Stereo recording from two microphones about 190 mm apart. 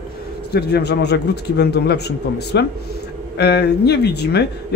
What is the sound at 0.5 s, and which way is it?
Speech, 60° left (ahead or behind).